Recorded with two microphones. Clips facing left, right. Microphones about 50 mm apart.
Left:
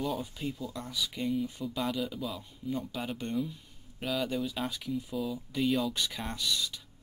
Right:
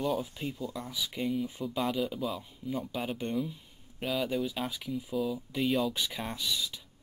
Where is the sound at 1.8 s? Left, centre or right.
Centre.